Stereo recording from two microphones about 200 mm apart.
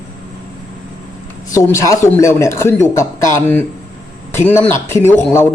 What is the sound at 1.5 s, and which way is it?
Speech, 15° left (ahead or behind).